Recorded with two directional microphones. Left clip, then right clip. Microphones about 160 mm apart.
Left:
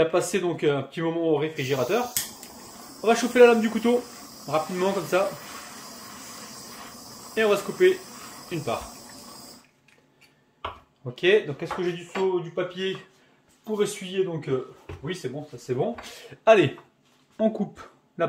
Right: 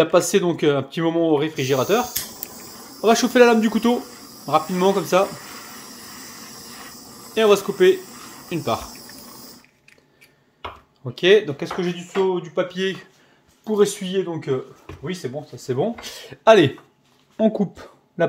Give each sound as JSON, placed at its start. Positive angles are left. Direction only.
{"t": 0.0, "sound": "speech", "side_deg": -45}
{"t": 5.4, "sound": "a sound", "side_deg": 0}
{"t": 7.3, "sound": "speech", "side_deg": -40}
{"t": 8.1, "sound": "a sound", "side_deg": -5}
{"t": 11.1, "sound": "speech", "side_deg": -50}
{"t": 17.4, "sound": "speech", "side_deg": -35}